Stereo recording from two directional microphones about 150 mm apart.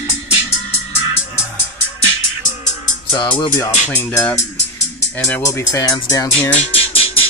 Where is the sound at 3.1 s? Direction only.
35° left (ahead or behind).